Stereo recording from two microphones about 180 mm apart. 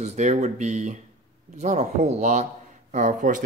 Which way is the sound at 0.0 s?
40° right (ahead or behind).